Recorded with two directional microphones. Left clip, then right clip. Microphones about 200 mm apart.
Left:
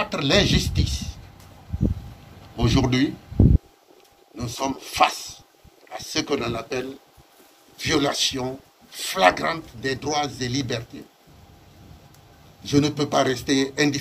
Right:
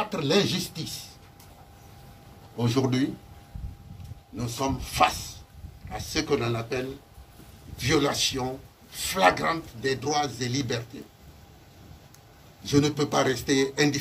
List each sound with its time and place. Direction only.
0.0 s speech: 50° left (ahead or behind)
2.5 s a man's voice: 45° left (ahead or behind)
4.4 s a man's voice: 45° left (ahead or behind)
12.6 s a man's voice: 45° left (ahead or behind)